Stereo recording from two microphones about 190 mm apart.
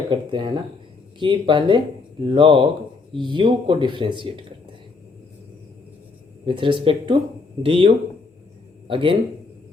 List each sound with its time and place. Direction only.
0.1 s speech: 25° right (ahead or behind)
6.4 s speech: 25° right (ahead or behind)